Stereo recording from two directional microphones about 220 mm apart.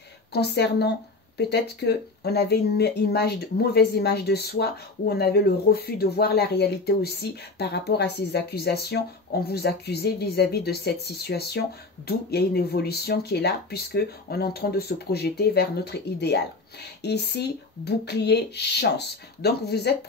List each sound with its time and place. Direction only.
0.3 s speech: 50° left (ahead or behind)